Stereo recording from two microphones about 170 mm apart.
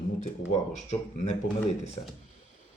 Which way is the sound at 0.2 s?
45° left (ahead or behind).